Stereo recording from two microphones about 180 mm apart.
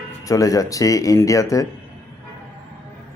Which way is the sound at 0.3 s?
20° left (ahead or behind).